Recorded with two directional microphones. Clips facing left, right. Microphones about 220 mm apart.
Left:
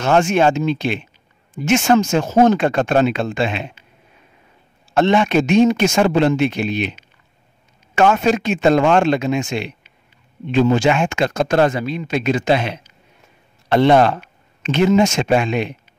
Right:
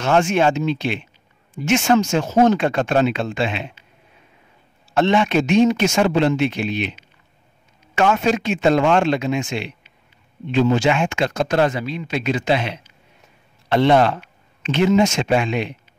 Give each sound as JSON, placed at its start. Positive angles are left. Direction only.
{"t": 0.0, "sound": "speech", "side_deg": 40}
{"t": 4.9, "sound": "speech", "side_deg": 45}